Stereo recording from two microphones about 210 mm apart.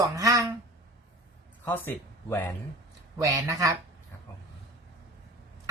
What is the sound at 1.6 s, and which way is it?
Speech, 10° left (ahead or behind).